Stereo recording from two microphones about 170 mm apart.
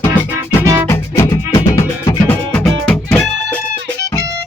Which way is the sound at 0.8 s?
15° left (ahead or behind).